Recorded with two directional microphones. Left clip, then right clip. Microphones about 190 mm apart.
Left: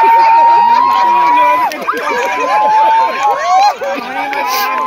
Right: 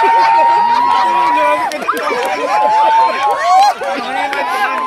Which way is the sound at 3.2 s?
65° right (ahead or behind).